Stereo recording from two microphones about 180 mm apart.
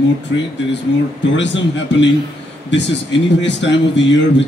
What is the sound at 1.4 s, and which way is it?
A man's voice, 85° left.